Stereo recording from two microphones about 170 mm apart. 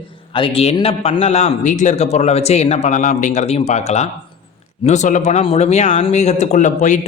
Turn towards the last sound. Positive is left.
turn(degrees=45)  # may be behind; listen again after turning